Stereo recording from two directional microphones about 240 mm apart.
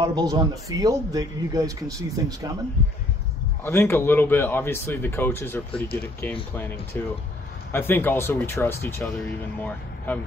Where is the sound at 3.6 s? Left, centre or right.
Centre.